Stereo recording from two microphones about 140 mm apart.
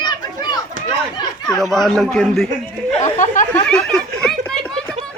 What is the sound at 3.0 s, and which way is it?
Speech, 60° left (ahead or behind).